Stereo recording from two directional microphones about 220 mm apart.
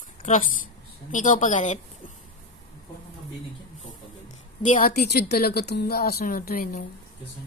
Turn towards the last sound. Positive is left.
turn(degrees=40)  # may be behind; listen again after turning